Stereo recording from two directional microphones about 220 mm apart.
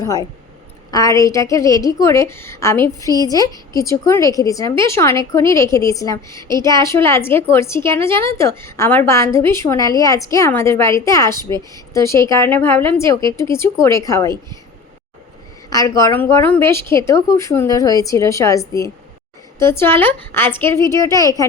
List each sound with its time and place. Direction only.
0.0 s a woman's voice: 15° left (ahead or behind)
15.7 s a woman's voice: 15° left (ahead or behind)